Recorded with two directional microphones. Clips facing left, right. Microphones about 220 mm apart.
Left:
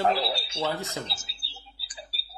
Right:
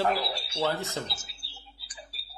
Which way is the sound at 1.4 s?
70° left (ahead or behind).